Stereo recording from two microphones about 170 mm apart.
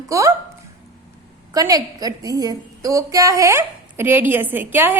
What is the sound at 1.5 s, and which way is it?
A woman's voice, 20° right (ahead or behind).